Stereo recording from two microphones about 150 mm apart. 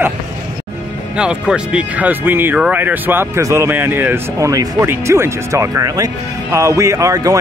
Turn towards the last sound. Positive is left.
turn(degrees=-20)  # may be behind; listen again after turning